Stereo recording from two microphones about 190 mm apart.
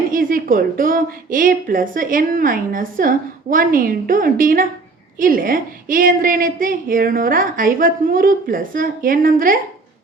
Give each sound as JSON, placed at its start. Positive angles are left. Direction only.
{"t": 0.1, "sound": "a woman's voice", "side_deg": -45}